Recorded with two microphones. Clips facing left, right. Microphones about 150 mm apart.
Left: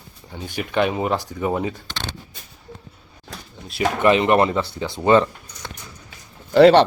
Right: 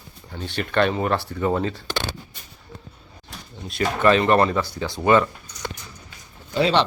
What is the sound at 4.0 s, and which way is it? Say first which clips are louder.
Speech: left 1 dB; 15° left (ahead or behind).